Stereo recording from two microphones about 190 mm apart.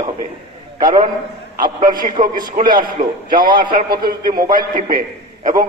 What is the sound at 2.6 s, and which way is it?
A man's voice, 40° right (ahead or behind).